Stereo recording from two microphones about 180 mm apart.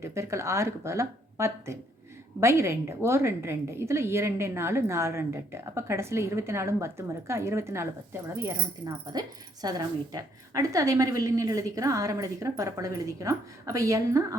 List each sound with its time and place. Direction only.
0.0 s a woman's voice: 15° right (ahead or behind)